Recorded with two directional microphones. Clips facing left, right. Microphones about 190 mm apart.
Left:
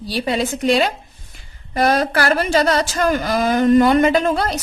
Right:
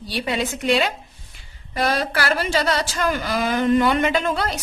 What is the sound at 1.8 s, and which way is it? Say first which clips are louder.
Speech: left 5 dB; 45° left (ahead or behind).